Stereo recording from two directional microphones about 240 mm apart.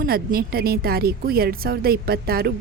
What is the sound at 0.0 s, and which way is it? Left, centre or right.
A woman's voice, right.